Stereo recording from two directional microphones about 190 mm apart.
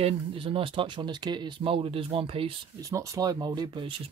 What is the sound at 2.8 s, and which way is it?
Speech, 15° right (ahead or behind).